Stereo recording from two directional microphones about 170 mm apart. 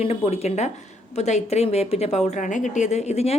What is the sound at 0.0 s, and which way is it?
Speech, 35° left (ahead or behind).